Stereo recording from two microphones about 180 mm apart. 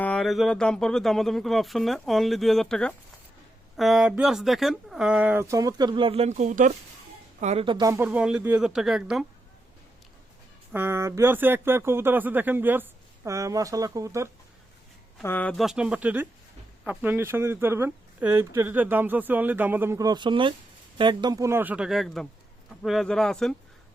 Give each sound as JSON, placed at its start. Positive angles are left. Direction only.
{"t": 0.0, "sound": "speech", "side_deg": 5}
{"t": 10.7, "sound": "speech", "side_deg": -15}
{"t": 15.2, "sound": "speech", "side_deg": 10}